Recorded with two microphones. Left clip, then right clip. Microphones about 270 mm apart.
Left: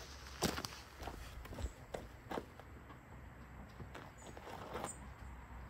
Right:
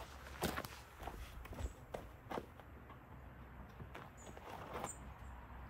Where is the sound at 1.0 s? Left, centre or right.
Left.